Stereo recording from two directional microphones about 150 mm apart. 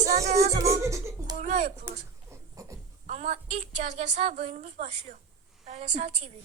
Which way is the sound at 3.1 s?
45° right (ahead or behind).